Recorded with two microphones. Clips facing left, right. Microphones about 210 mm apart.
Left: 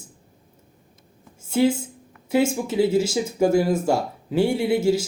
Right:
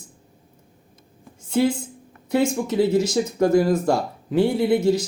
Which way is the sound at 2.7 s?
25° left (ahead or behind).